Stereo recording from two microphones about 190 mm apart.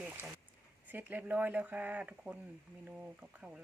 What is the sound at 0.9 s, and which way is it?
Speech, 10° right (ahead or behind).